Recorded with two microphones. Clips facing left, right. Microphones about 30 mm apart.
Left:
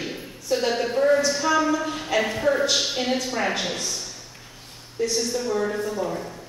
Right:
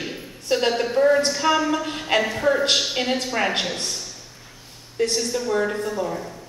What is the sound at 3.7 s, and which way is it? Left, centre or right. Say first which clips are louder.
A man's voice: right 1 dB; right.